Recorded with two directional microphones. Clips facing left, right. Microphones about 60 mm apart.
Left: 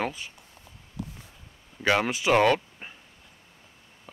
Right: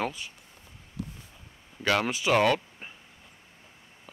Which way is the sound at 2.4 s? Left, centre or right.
Centre.